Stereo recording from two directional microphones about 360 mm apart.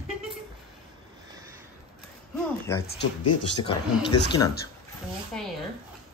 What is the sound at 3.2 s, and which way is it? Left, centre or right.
Speech, left.